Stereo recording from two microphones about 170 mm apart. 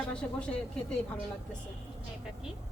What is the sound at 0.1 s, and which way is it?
Speech, 5° left (ahead or behind).